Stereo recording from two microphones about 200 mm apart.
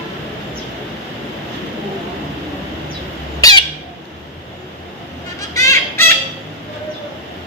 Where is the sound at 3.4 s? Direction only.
20° left (ahead or behind).